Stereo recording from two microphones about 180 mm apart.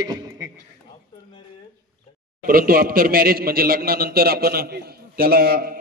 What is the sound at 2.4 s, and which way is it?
A man's voice, 55° right (ahead or behind).